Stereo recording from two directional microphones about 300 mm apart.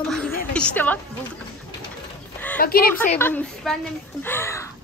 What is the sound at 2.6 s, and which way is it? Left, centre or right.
Speech, left.